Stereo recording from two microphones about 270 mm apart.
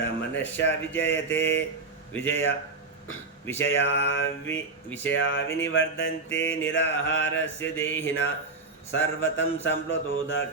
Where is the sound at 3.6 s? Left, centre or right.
Left.